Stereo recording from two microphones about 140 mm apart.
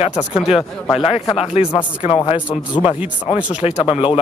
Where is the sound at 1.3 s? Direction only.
45° left (ahead or behind).